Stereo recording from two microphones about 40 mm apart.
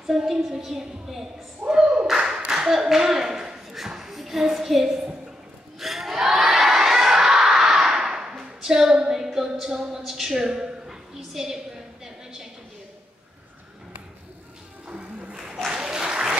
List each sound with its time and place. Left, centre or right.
0.0 s a woman's voice: centre
1.7 s a sound: right
2.0 s clapping: centre
2.5 s a woman's voice: centre
5.8 s crowd: centre
8.5 s a woman's voice: centre
11.1 s a sound: centre
14.9 s music: right
15.3 s a sound: centre
15.7 s applause: centre